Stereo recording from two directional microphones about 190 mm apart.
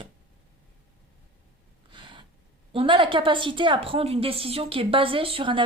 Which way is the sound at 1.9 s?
25° right (ahead or behind).